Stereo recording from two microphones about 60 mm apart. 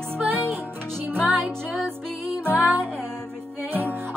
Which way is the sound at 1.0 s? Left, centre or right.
Right.